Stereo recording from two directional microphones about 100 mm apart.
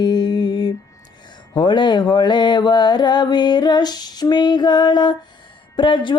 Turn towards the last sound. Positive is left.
turn(degrees=55)  # may be behind; listen again after turning